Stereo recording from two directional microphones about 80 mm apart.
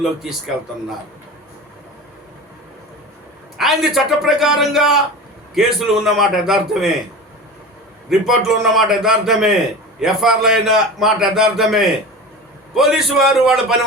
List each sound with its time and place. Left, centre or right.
0.0 s a man's voice: centre
3.6 s a man's voice: centre
8.3 s a man's voice: centre